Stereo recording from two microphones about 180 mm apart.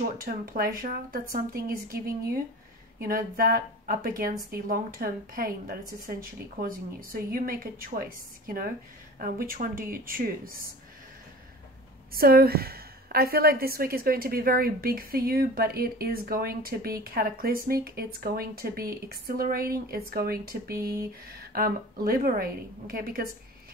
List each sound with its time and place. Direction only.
0.2 s a woman's voice: 55° right (ahead or behind)
9.2 s speech: 50° right (ahead or behind)
12.1 s a woman's voice: 55° right (ahead or behind)
20.7 s speech: 15° right (ahead or behind)
21.5 s a woman's voice: 55° right (ahead or behind)